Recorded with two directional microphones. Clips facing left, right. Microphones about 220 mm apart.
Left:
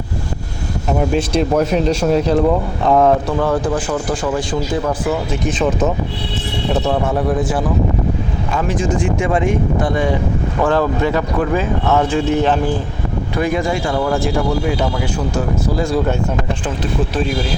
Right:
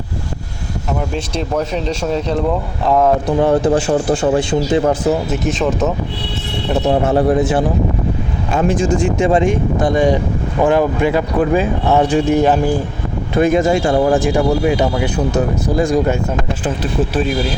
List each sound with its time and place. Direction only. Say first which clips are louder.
1.1 s speech: left 6 dB; 5° left (ahead or behind)
3.2 s speech: right 4 dB; 20° right (ahead or behind)
4.8 s speech: right 4 dB; 40° right (ahead or behind)
5.3 s speech: right 1 dB; centre (ahead or behind)
7.1 s speech: right 4 dB; 25° right (ahead or behind)
8.9 s speech: right 3 dB; 25° right (ahead or behind)
10.6 s speech: right 3 dB; 15° right (ahead or behind)
13.3 s speech: right 6 dB; 20° right (ahead or behind)
13.9 s speech: right 4 dB; 35° right (ahead or behind)
14.2 s speech: right 3 dB; 15° right (ahead or behind)